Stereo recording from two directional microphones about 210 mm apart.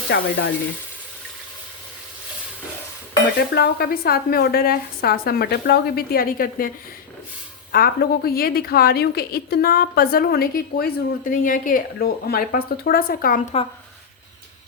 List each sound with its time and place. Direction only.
0.1 s speech: 55° left (ahead or behind)
3.3 s a woman's voice: 50° left (ahead or behind); by 13.7 s 35° left (ahead or behind)